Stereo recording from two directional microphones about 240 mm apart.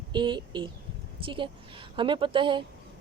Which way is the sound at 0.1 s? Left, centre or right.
Centre.